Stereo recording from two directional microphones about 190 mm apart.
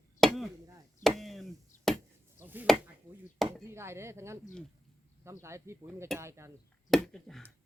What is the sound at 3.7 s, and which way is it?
Speech, 15° right (ahead or behind).